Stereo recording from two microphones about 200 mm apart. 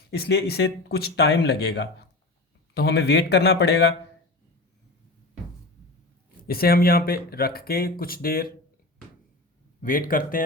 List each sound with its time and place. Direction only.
0.1 s speech: 55° left (ahead or behind)
6.5 s speech: 50° left (ahead or behind)
9.8 s speech: 45° left (ahead or behind)